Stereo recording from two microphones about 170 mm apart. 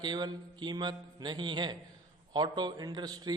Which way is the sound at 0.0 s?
25° right (ahead or behind).